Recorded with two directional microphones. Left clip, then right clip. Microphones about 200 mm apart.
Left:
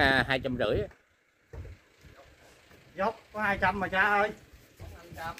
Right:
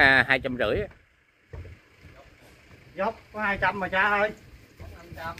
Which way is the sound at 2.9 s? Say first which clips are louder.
Right 2 dB; 15° left (ahead or behind).